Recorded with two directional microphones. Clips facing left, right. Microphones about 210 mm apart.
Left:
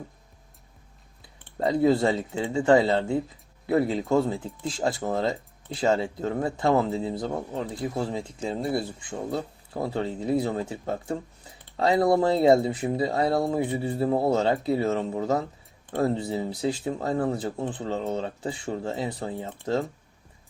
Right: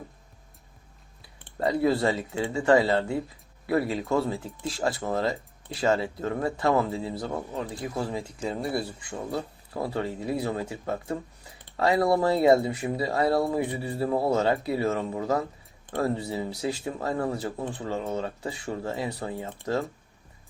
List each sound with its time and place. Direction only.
1.5 s speech: 20° left (ahead or behind)